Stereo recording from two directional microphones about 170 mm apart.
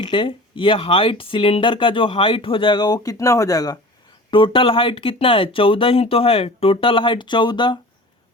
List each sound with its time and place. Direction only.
0.0 s speech: 30° left (ahead or behind)